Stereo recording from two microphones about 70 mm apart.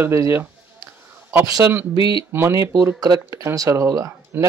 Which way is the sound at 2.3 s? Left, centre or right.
Right.